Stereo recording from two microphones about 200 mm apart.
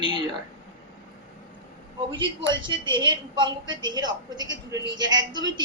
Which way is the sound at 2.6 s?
20° right (ahead or behind).